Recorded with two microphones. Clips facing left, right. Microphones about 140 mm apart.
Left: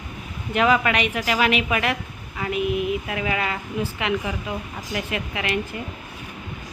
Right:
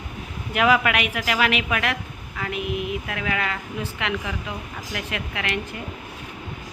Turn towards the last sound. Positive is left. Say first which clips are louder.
# left 2 dB
turn(degrees=5)  # may be behind; listen again after turning